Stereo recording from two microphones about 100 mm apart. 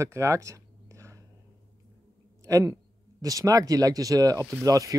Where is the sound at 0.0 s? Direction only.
30° right (ahead or behind).